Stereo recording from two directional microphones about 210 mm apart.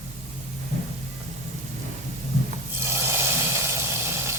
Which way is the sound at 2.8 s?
10° right (ahead or behind).